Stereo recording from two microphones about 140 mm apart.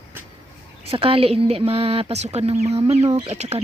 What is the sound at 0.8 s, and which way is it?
Speech, 40° right (ahead or behind).